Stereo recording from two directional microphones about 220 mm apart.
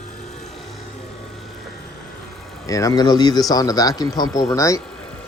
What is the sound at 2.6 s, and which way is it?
Speech, 15° left (ahead or behind).